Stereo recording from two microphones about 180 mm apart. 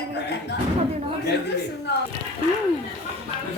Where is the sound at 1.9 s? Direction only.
70° left (ahead or behind).